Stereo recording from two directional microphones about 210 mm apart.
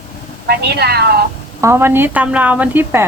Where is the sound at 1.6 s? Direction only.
10° right (ahead or behind).